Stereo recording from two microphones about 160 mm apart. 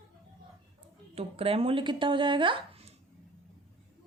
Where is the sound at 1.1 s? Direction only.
35° right (ahead or behind).